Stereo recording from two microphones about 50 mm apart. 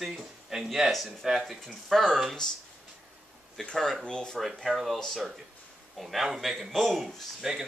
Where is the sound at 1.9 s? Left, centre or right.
Centre.